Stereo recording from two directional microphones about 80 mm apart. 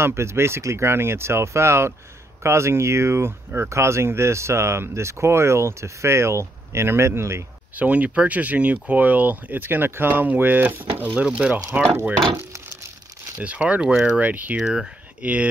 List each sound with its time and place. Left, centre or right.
0.0 s speech: right
7.7 s speech: centre
11.2 s speech: centre
13.4 s speech: centre
14.6 s speech: centre
15.2 s speech: centre